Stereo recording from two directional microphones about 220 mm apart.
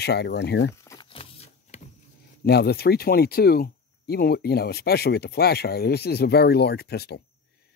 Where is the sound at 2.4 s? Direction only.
45° left (ahead or behind).